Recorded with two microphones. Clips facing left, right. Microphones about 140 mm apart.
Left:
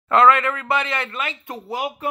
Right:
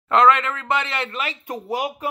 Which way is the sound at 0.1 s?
20° right (ahead or behind).